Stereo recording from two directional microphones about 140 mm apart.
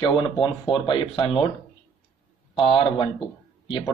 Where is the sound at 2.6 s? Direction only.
40° left (ahead or behind).